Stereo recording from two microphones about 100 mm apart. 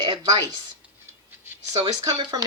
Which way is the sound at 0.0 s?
50° right (ahead or behind).